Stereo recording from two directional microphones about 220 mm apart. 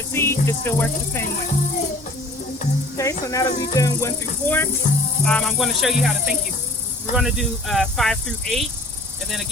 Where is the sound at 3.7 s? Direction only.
15° left (ahead or behind).